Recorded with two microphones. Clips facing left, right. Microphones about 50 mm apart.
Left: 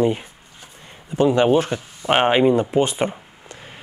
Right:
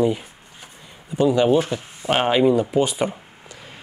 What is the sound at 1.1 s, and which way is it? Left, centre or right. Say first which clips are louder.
A man's voice: left 1 dB; left.